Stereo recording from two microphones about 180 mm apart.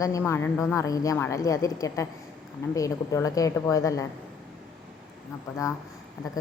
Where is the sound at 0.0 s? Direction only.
15° left (ahead or behind).